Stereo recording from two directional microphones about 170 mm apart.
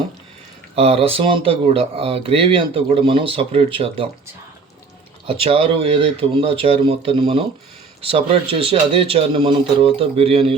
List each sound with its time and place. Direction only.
0.8 s speech: 35° right (ahead or behind)
5.2 s speech: 35° right (ahead or behind)